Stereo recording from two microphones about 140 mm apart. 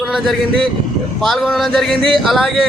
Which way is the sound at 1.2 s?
Centre (ahead or behind).